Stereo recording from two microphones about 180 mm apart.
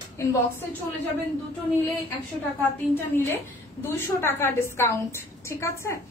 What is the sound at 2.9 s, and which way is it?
A woman's voice, 10° left (ahead or behind).